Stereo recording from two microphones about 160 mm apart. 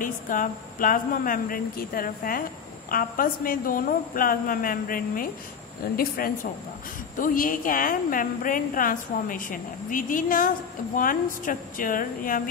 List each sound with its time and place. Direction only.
0.0 s a woman's voice: 55° left (ahead or behind)